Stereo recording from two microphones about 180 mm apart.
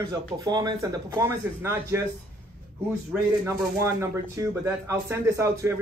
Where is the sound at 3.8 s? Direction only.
15° right (ahead or behind).